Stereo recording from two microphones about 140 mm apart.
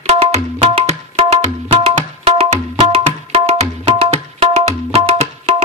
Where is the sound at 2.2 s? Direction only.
50° right (ahead or behind).